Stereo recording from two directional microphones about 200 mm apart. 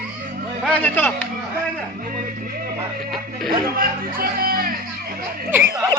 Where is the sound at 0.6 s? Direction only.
5° left (ahead or behind).